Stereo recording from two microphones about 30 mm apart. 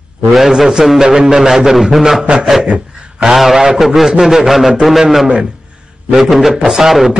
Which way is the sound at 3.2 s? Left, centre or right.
Centre.